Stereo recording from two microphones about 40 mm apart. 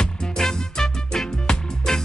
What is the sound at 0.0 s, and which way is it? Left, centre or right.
Music, centre.